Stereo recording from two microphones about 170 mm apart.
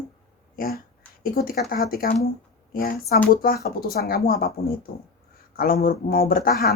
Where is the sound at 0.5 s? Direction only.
55° left (ahead or behind).